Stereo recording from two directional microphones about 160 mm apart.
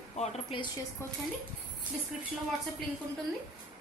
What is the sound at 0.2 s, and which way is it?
Speech, 40° left (ahead or behind).